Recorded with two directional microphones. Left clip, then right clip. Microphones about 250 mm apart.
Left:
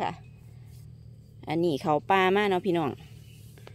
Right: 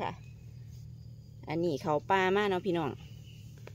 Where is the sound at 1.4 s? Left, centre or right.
Left.